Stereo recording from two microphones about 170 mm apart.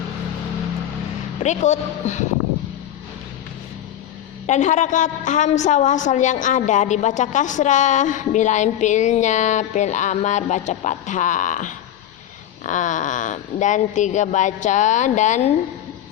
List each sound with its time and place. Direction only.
1.4 s a woman's voice: 45° left (ahead or behind)
4.4 s a woman's voice: 45° left (ahead or behind)